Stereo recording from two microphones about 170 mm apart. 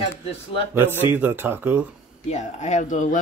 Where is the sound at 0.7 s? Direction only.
10° right (ahead or behind).